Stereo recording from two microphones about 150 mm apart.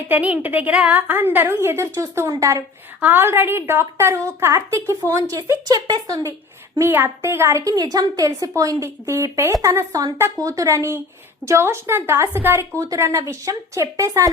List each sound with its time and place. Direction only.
0.1 s a woman's voice: 10° right (ahead or behind)